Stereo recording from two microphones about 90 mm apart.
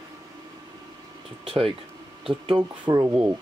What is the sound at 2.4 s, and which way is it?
Speech, 60° right (ahead or behind).